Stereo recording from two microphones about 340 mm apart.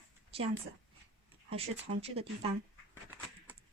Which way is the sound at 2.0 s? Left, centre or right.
Centre.